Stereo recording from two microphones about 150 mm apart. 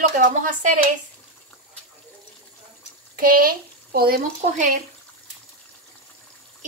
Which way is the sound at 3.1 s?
70° right (ahead or behind).